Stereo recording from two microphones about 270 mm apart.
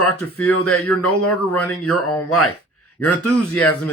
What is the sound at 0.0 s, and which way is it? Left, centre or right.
Speech, left.